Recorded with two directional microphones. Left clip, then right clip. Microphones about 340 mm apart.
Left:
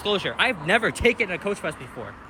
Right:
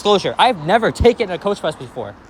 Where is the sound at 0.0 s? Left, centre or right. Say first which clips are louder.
Right 9 dB; centre.